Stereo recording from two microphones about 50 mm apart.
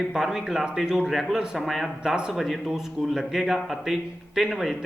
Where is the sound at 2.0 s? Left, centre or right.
Centre.